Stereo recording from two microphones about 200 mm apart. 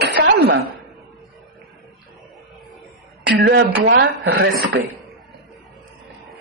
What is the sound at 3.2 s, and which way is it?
A woman's voice, 65° right (ahead or behind).